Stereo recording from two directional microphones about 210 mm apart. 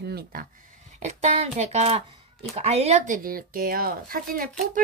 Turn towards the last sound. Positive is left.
turn(degrees=-45)  # may be behind; listen again after turning